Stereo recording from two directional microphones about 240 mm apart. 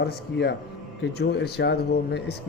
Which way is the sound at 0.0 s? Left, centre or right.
Left.